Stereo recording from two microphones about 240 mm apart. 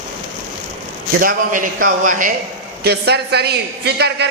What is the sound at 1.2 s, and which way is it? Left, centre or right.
A man's voice, right.